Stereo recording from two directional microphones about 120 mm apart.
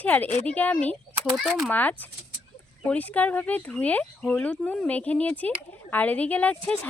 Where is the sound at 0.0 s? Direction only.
15° left (ahead or behind).